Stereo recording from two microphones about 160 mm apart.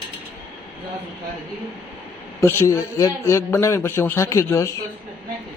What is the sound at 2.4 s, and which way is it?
A man's voice, 15° left (ahead or behind).